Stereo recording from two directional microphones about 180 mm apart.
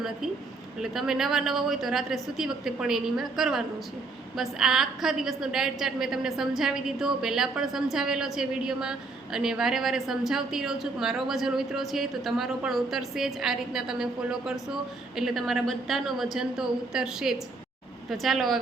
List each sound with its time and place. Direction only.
0.8 s a woman's voice: centre (ahead or behind)